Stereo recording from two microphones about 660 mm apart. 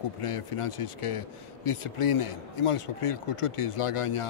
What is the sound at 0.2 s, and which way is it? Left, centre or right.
A man's voice, left.